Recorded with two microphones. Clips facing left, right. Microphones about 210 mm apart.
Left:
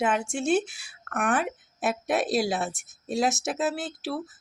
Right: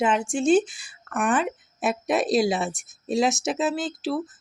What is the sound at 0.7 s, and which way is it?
Speech, 70° left (ahead or behind).